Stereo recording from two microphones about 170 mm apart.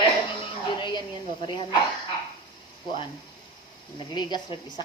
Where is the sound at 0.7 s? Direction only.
30° left (ahead or behind).